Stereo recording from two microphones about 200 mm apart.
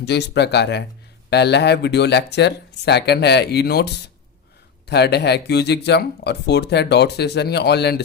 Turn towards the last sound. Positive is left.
turn(degrees=55)  # may be behind; listen again after turning